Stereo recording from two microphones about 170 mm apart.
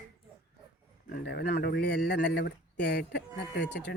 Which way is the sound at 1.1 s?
70° left (ahead or behind).